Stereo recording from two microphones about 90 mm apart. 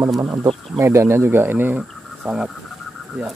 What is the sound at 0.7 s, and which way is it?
Speech, 30° right (ahead or behind).